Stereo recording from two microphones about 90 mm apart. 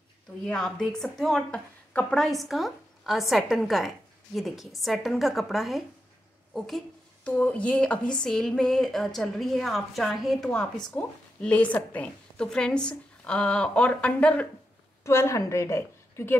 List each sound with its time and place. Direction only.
0.5 s a woman's voice: 5° left (ahead or behind)
7.2 s speech: 15° left (ahead or behind)
15.0 s a woman's voice: 35° left (ahead or behind)